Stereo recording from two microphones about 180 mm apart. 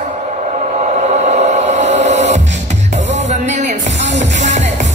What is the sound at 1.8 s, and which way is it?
Music, 40° right (ahead or behind).